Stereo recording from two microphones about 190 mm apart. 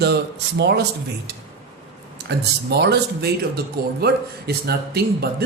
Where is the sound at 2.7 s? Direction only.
60° right (ahead or behind).